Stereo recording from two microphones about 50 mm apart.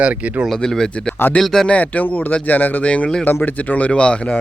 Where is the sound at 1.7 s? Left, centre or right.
Left.